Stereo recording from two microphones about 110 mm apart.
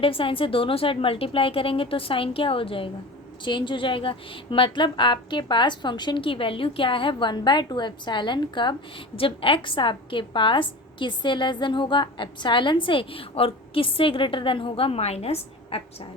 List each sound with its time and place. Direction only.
0.0 s a woman's voice: 55° left (ahead or behind)